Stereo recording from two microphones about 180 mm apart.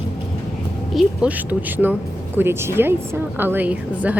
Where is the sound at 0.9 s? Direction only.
5° right (ahead or behind).